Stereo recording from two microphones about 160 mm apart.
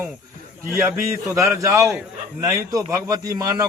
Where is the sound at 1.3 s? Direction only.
20° right (ahead or behind).